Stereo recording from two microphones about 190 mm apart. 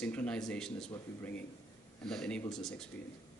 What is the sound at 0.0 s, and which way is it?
Speech, 5° left (ahead or behind).